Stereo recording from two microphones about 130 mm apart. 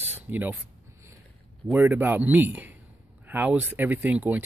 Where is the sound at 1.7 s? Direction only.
15° right (ahead or behind).